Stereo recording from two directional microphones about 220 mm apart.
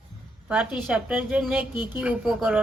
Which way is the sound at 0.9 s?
5° right (ahead or behind).